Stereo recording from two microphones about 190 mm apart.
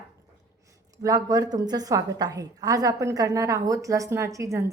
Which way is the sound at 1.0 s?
20° right (ahead or behind).